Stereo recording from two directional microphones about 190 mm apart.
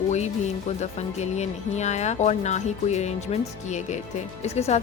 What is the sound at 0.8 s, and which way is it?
Speech, 35° left (ahead or behind).